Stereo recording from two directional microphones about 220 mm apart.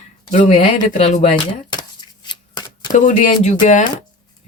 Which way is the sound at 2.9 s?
35° left (ahead or behind).